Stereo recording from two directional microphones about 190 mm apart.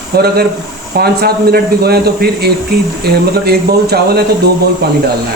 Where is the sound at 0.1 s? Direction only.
55° right (ahead or behind).